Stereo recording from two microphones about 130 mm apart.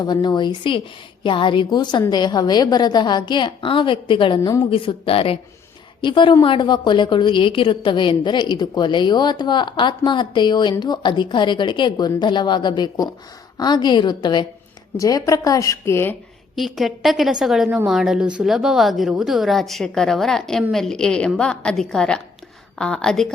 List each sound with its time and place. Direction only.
0.0 s a woman's voice: 35° left (ahead or behind)
16.6 s a woman's voice: centre (ahead or behind)